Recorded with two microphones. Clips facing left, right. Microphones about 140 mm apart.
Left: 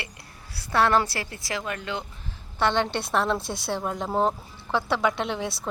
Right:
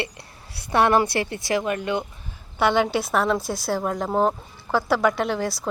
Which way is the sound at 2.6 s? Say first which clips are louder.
Right 4 dB; 10° right (ahead or behind).